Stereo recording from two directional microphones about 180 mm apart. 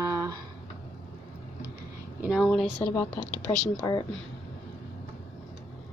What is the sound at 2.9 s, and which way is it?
Speech, 20° left (ahead or behind).